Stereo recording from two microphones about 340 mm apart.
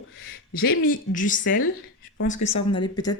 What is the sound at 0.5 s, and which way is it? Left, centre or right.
Speech, left.